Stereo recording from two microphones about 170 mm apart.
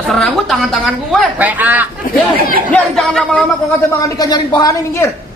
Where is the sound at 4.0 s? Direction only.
20° left (ahead or behind).